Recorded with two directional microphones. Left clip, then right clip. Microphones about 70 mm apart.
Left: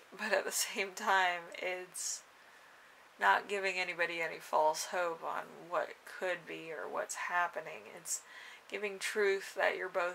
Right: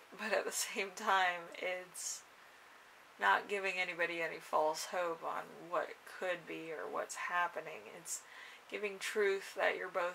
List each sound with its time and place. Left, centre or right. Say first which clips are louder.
0.2 s speech: left 3 dB; left
3.2 s speech: left 2 dB; left